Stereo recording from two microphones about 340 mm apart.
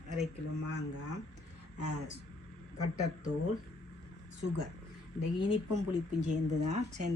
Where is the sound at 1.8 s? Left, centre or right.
Right.